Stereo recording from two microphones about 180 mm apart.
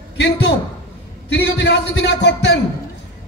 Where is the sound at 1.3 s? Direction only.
75° left (ahead or behind).